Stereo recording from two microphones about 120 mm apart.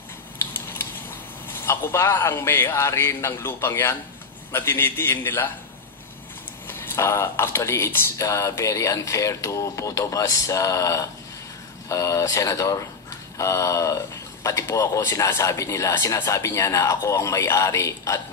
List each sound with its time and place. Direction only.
0.5 s a sound: 20° left (ahead or behind)
1.5 s speech: 20° left (ahead or behind)
6.7 s speech: 20° left (ahead or behind)